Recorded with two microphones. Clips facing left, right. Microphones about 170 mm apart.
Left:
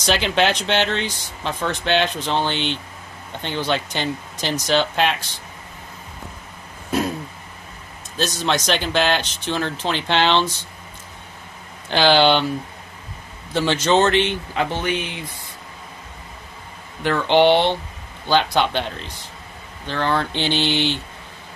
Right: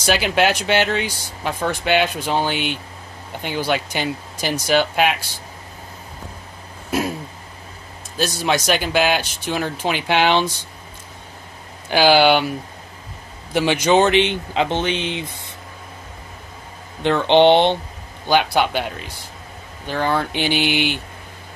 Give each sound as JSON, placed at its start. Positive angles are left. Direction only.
{"t": 0.0, "sound": "speech", "side_deg": -5}
{"t": 6.9, "sound": "throat clearing", "side_deg": -5}
{"t": 8.2, "sound": "speech", "side_deg": -10}
{"t": 11.9, "sound": "speech", "side_deg": -10}
{"t": 17.0, "sound": "speech", "side_deg": -20}